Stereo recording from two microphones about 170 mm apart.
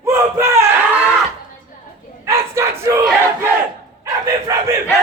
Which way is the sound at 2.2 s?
15° right (ahead or behind).